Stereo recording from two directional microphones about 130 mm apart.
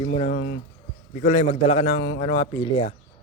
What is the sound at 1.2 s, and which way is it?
A man's voice, 55° left (ahead or behind).